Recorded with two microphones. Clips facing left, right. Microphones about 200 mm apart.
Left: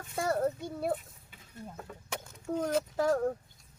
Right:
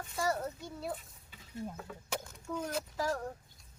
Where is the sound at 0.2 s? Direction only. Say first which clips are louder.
Left 5 dB; 55° left (ahead or behind).